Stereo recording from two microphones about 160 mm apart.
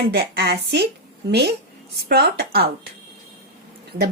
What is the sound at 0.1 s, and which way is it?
Speech, 90° right.